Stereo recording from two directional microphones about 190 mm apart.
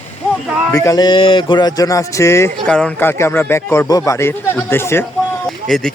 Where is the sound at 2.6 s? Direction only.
5° left (ahead or behind).